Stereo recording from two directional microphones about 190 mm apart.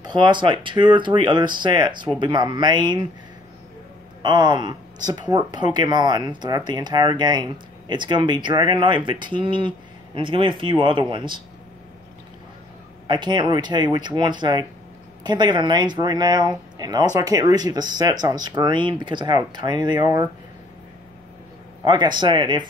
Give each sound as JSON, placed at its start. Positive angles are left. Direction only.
{"t": 0.0, "sound": "speech", "side_deg": -25}
{"t": 4.2, "sound": "speech", "side_deg": -20}
{"t": 13.0, "sound": "speech", "side_deg": -25}
{"t": 21.8, "sound": "speech", "side_deg": -25}